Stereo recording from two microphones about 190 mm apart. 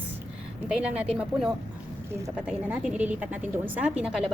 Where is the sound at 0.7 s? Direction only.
5° right (ahead or behind).